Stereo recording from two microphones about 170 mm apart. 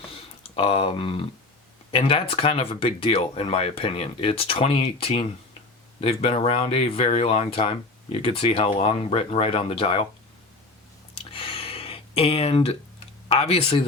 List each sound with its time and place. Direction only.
0.5 s speech: 35° left (ahead or behind)
11.3 s a sound: 35° left (ahead or behind)
13.2 s speech: 35° left (ahead or behind)